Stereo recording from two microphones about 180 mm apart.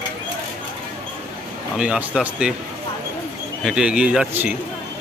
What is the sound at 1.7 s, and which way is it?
Speech, 5° right (ahead or behind).